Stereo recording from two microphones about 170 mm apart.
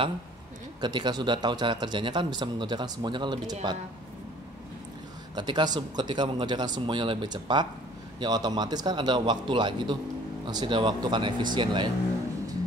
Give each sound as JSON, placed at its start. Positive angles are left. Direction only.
{"t": 0.7, "sound": "a man's voice", "side_deg": -25}
{"t": 5.3, "sound": "a man's voice", "side_deg": -25}